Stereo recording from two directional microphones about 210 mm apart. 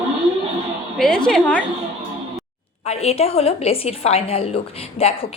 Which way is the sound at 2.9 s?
30° left (ahead or behind).